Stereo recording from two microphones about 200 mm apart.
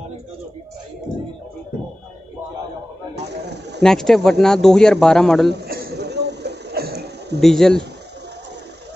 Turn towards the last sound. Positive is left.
turn(degrees=0)  # may be behind; listen again after turning